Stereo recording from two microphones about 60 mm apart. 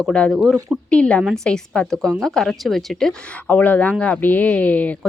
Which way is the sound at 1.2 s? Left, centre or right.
Centre.